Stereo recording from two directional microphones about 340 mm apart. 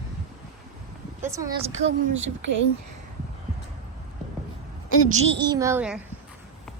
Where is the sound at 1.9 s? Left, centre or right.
Right.